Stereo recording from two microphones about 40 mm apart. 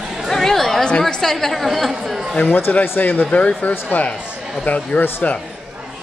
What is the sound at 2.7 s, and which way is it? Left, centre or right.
Speech, left.